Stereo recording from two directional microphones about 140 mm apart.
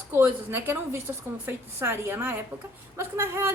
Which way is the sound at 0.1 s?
15° right (ahead or behind).